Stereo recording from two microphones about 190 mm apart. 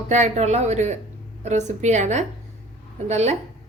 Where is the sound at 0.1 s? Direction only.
35° right (ahead or behind).